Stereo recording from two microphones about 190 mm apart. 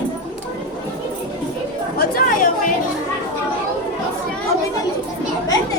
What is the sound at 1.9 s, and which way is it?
Chatter, 45° left (ahead or behind).